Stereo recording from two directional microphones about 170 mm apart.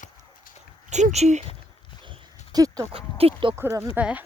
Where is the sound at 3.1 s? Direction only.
35° right (ahead or behind).